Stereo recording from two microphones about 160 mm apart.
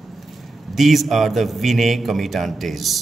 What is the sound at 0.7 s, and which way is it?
A man's voice, centre (ahead or behind).